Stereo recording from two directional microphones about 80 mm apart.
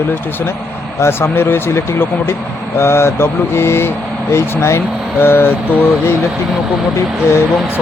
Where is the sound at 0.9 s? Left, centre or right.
Left.